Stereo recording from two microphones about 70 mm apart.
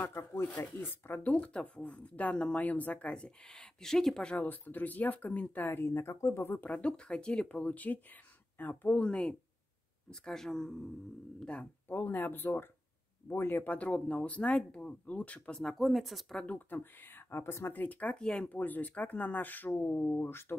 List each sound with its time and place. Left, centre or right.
0.0 s speech: left; by 4.5 s centre
4.5 s speech: left
6.7 s speech: centre
11.9 s speech: left
15.6 s speech: centre
16.4 s speech: left